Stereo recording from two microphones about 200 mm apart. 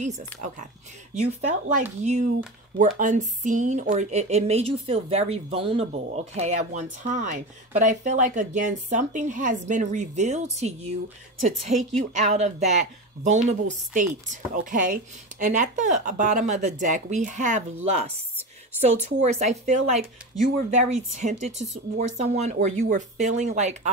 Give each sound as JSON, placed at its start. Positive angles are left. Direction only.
{"t": 0.0, "sound": "speech", "side_deg": -35}
{"t": 12.0, "sound": "speech", "side_deg": -35}